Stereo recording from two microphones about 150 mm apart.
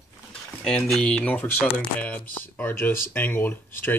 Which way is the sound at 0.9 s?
5° left (ahead or behind).